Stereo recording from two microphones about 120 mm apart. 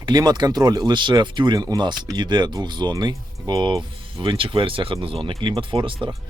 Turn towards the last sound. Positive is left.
turn(degrees=-45)  # may be behind; listen again after turning